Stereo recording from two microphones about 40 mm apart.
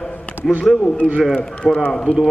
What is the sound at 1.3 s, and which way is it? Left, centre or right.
Speech, left.